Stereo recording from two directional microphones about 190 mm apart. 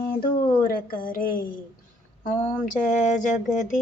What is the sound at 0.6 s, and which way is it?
Speech, 50° left (ahead or behind).